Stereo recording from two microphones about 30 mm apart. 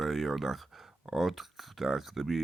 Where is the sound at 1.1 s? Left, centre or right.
Centre.